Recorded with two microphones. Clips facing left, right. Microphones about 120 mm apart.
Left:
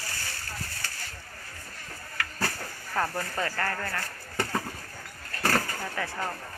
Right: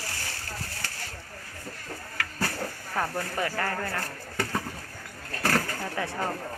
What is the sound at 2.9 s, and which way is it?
Speech, 10° right (ahead or behind).